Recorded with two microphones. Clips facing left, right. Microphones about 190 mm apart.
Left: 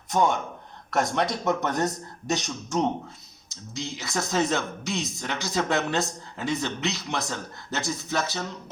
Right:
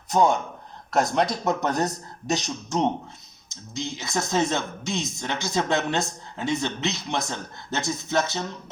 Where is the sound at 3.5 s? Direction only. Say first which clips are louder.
Right 2 dB; 20° right (ahead or behind).